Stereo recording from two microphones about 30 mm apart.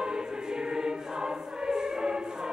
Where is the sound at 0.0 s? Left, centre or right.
Right.